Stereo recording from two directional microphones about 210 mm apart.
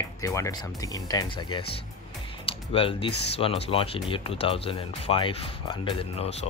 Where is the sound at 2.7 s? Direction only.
25° left (ahead or behind).